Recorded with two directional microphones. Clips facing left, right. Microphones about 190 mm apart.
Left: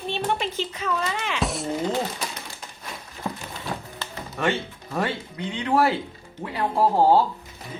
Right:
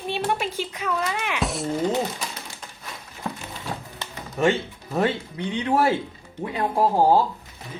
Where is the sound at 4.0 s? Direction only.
15° right (ahead or behind).